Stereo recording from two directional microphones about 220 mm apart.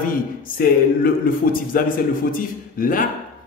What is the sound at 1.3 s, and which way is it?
Speech, 40° left (ahead or behind).